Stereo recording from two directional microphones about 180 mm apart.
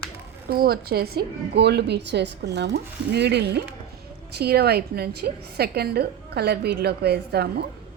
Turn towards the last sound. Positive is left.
turn(degrees=-65)  # may be behind; listen again after turning